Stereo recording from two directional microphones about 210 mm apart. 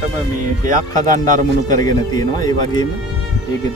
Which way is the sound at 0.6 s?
40° right (ahead or behind).